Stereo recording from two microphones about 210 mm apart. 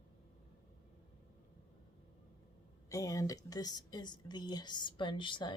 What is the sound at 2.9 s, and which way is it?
A woman's voice, 15° left (ahead or behind).